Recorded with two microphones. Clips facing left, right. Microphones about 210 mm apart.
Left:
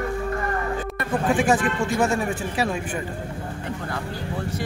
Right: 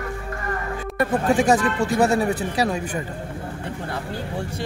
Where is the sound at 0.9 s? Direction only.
40° right (ahead or behind).